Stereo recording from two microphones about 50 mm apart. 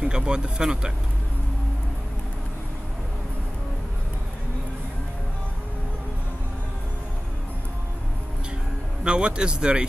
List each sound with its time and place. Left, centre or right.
0.0 s speech: centre
9.0 s speech: centre